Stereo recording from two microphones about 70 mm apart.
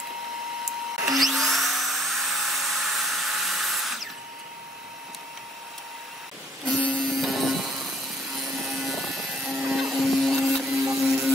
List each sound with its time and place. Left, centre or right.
0.9 s vacuum cleaner: centre
6.6 s music: centre
7.0 s music: centre
8.4 s helicopter: centre